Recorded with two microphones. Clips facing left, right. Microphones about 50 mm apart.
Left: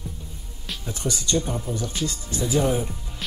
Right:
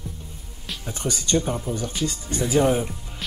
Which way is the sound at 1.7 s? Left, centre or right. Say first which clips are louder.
Right 1 dB; centre.